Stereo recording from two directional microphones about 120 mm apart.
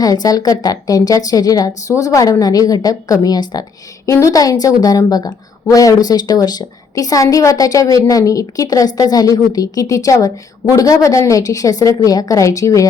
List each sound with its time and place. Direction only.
0.0 s a woman's voice: 30° left (ahead or behind)